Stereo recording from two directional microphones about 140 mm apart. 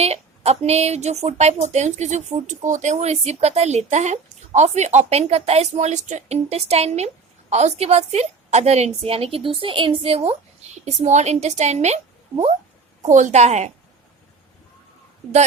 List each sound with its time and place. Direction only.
0.0 s speech: 45° right (ahead or behind)
13.0 s a woman's voice: 60° right (ahead or behind)